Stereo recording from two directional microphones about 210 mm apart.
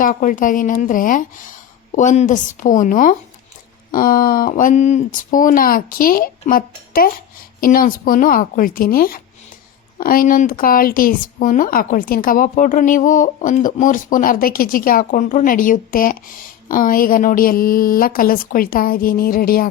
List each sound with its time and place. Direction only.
0.0 s a woman's voice: 40° left (ahead or behind)